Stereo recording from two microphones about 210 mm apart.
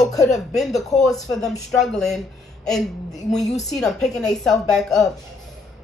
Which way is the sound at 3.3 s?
Centre (ahead or behind).